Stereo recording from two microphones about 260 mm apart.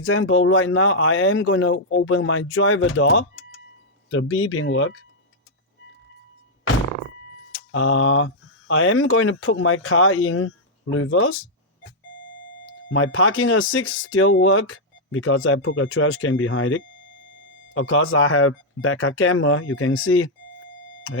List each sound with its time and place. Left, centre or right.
0.0 s speech: left
7.5 s speech: left
12.9 s speech: left